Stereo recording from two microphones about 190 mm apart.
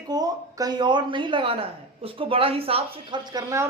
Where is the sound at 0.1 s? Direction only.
20° right (ahead or behind).